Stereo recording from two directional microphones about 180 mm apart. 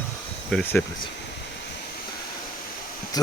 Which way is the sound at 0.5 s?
10° left (ahead or behind).